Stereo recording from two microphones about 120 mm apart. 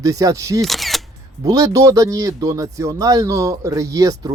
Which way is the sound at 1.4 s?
30° right (ahead or behind).